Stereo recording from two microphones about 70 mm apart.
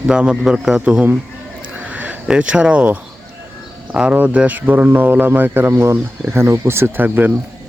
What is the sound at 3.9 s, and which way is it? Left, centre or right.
Speech, centre.